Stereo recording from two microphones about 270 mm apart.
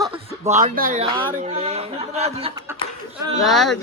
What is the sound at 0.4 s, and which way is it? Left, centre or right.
Speech, right.